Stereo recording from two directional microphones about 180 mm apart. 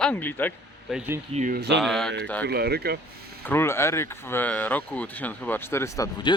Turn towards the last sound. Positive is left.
turn(degrees=20)  # may be behind; listen again after turning